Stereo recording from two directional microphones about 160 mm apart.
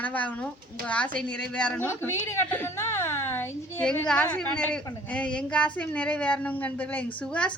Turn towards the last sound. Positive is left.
turn(degrees=5)  # may be behind; listen again after turning